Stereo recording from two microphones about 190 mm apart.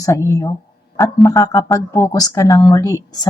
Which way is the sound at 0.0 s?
15° left (ahead or behind).